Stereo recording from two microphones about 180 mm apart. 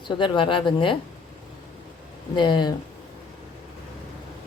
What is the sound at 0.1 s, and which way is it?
Speech, 25° left (ahead or behind).